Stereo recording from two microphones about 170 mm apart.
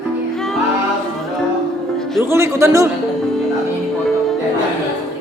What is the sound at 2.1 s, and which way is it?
Music, 15° right (ahead or behind).